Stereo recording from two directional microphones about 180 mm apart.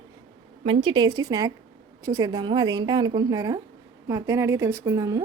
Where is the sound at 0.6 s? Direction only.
30° right (ahead or behind).